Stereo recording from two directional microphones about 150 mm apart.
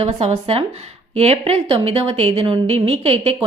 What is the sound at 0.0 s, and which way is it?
A woman's voice, 50° right (ahead or behind).